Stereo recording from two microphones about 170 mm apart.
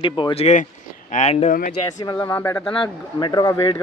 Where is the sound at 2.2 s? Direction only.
10° left (ahead or behind).